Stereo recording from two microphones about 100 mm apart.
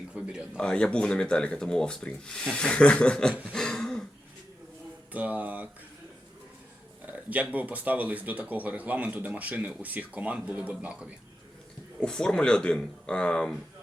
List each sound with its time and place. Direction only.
0.1 s a sound: 10° right (ahead or behind)
0.5 s speech: 10° left (ahead or behind)
3.5 s throat clearing: 5° left (ahead or behind)
5.1 s speech: 15° right (ahead or behind)
7.0 s speech: 15° right (ahead or behind)
12.0 s speech: 5° left (ahead or behind)